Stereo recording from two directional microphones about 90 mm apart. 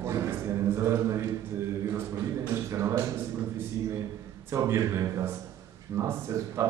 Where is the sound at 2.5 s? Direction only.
35° right (ahead or behind).